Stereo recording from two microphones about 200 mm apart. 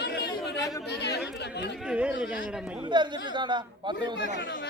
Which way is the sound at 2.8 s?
20° right (ahead or behind).